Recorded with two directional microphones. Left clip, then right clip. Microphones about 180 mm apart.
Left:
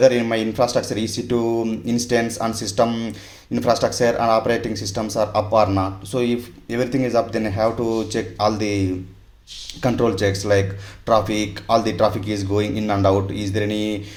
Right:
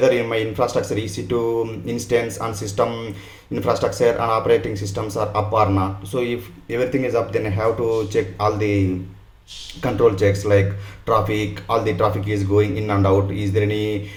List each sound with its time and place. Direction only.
0.0 s speech: 30° left (ahead or behind)
1.9 s speech: 35° left (ahead or behind)
9.8 s speech: 30° left (ahead or behind)